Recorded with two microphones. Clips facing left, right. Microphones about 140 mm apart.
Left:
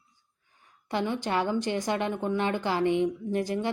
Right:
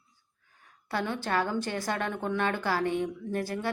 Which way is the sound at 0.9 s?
15° left (ahead or behind).